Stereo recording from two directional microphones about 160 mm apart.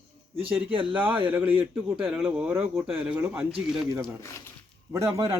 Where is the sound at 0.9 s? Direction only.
10° right (ahead or behind).